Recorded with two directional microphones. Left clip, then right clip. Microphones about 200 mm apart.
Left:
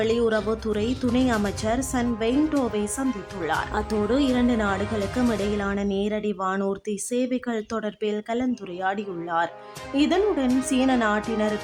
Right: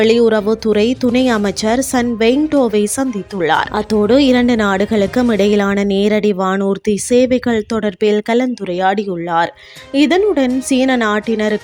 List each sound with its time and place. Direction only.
0.0 s speech: 35° right (ahead or behind)